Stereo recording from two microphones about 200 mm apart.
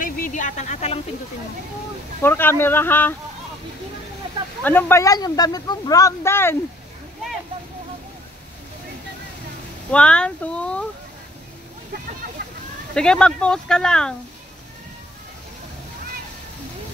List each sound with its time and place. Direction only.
0.0 s a sound: 40° left (ahead or behind)
2.2 s speech: 10° left (ahead or behind)
4.6 s speech: 10° left (ahead or behind)
9.8 s speech: 5° left (ahead or behind)
12.4 s a sound: 55° right (ahead or behind)
12.9 s speech: 5° left (ahead or behind)